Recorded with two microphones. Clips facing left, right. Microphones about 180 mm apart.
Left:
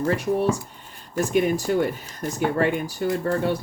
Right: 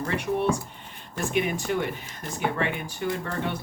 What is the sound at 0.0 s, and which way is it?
Speech, 40° left (ahead or behind).